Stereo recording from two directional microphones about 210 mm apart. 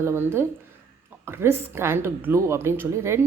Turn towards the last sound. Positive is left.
turn(degrees=-15)  # may be behind; listen again after turning